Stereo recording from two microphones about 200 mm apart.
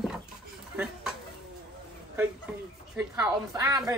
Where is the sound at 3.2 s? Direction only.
15° right (ahead or behind).